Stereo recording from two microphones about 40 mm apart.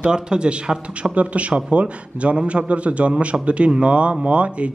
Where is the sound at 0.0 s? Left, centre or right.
Right.